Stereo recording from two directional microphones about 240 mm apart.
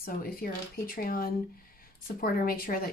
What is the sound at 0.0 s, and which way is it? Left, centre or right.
Speech, left.